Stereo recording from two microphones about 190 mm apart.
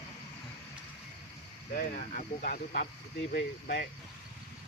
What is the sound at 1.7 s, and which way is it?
Speech, 45° left (ahead or behind).